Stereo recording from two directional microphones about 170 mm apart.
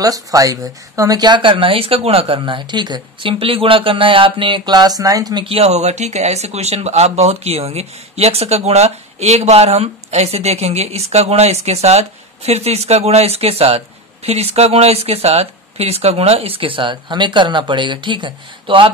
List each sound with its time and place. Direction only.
0.0 s speech: 20° right (ahead or behind)